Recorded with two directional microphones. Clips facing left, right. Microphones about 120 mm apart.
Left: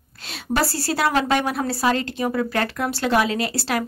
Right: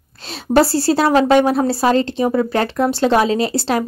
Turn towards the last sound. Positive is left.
turn(degrees=-25)  # may be behind; listen again after turning